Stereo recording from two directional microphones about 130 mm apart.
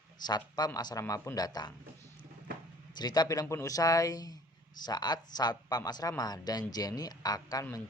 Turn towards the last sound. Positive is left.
turn(degrees=25)  # may be behind; listen again after turning